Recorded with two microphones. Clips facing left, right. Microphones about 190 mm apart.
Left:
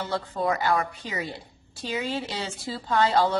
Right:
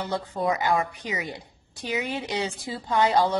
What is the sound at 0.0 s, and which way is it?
A woman's voice, 20° right (ahead or behind).